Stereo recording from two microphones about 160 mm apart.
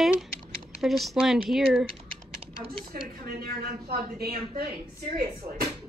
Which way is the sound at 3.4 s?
80° right.